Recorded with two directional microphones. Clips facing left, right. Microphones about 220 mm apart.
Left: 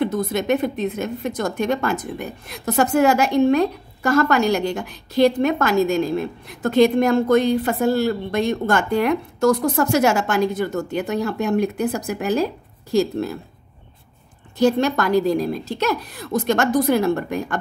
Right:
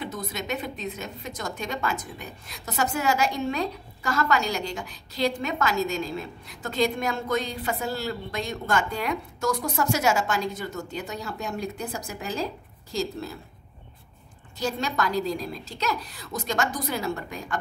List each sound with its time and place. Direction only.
0.0 s a woman's voice: 55° left (ahead or behind)
14.6 s a woman's voice: 55° left (ahead or behind)